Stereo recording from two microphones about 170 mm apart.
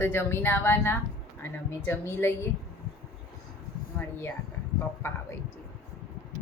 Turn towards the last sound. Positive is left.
turn(degrees=15)  # may be behind; listen again after turning